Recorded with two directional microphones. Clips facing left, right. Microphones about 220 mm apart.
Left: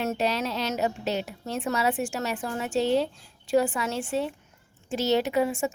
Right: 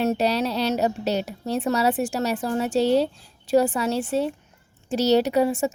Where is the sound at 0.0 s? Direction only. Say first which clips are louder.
Right 5 dB; 35° right (ahead or behind).